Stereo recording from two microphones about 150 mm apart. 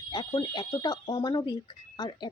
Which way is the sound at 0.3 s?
30° left (ahead or behind).